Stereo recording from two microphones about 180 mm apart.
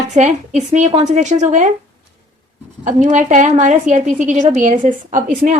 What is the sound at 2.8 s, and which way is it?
A woman's voice, 40° right (ahead or behind).